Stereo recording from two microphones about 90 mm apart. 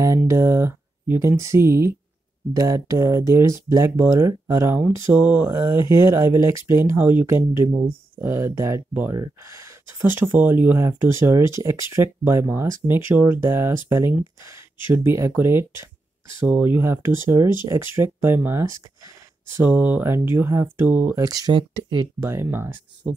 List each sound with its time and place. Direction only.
0.0 s speech: 35° right (ahead or behind)
5.1 s speech: 20° right (ahead or behind)
21.2 s speech: 45° right (ahead or behind)
21.5 s speech: 55° right (ahead or behind)
22.2 s speech: 30° right (ahead or behind)